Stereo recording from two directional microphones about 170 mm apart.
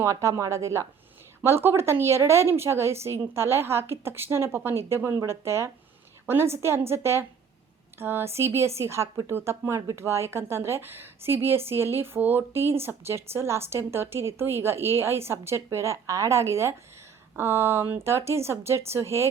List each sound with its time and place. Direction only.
0.0 s speech: 15° right (ahead or behind)